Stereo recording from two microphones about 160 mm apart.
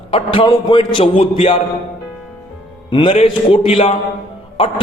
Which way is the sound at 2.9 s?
35° left (ahead or behind).